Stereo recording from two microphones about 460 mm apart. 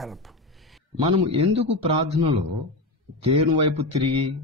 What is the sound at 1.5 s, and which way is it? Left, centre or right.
Speech, right.